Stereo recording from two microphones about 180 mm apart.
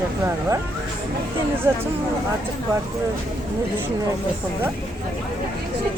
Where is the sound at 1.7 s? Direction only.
20° right (ahead or behind).